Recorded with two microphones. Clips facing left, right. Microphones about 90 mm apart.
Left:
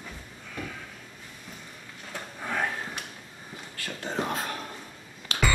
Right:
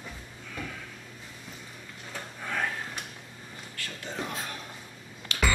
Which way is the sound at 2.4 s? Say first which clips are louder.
Left 2 dB; 10° left (ahead or behind).